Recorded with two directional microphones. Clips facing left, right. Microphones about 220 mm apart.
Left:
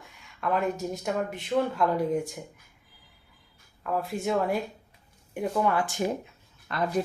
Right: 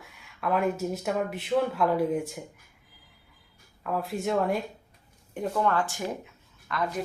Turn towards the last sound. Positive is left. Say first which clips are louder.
# left 1 dB
turn(degrees=30)  # may be behind; listen again after turning